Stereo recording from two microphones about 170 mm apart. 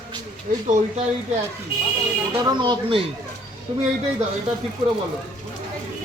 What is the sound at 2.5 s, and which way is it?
Speech, 25° right (ahead or behind).